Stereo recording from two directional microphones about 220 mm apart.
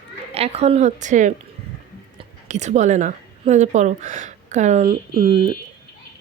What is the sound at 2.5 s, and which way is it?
A woman's voice, 30° right (ahead or behind).